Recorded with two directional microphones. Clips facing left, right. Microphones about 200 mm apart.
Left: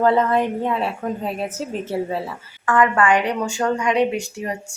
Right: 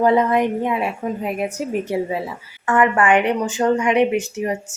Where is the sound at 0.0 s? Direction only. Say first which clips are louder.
Right 1 dB; 15° right (ahead or behind).